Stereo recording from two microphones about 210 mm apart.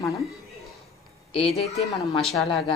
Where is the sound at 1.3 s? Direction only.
30° left (ahead or behind).